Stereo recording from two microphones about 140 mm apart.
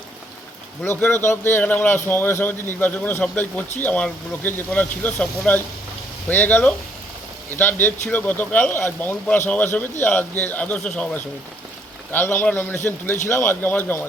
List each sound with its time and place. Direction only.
0.9 s speech: 15° left (ahead or behind)